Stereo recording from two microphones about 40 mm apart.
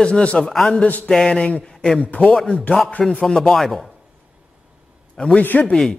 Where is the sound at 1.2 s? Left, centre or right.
Left.